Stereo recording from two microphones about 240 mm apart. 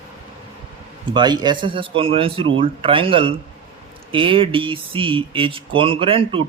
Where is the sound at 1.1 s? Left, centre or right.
Centre.